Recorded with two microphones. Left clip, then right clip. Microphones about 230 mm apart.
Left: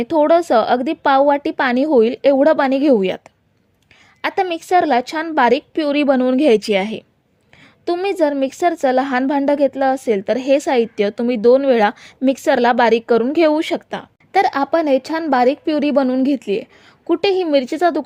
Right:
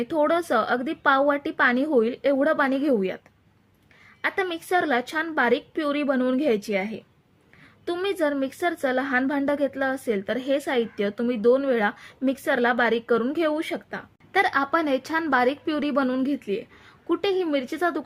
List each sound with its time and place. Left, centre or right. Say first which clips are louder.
0.0 s a woman's voice: left 9 dB; left